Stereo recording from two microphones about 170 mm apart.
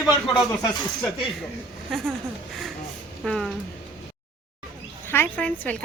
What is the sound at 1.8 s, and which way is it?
Speech, centre (ahead or behind).